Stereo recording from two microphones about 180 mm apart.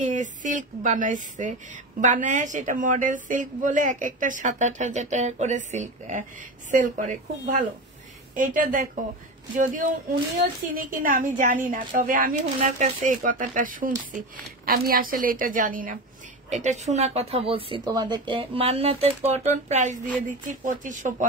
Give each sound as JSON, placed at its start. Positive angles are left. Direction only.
{"t": 0.0, "sound": "a woman's voice", "side_deg": -45}
{"t": 10.7, "sound": "a woman's voice", "side_deg": -50}